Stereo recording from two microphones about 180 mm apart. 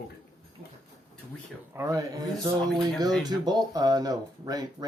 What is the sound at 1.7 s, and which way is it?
A man's voice, 15° right (ahead or behind).